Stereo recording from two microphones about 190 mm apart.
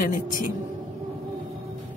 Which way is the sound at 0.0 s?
45° left (ahead or behind).